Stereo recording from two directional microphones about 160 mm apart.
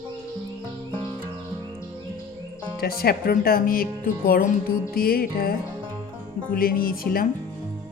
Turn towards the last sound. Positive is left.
turn(degrees=65)  # may be behind; listen again after turning